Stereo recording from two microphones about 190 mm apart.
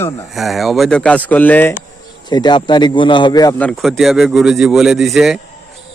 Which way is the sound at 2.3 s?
25° left (ahead or behind).